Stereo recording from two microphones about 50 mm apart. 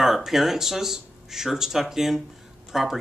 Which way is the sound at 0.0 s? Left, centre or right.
Centre.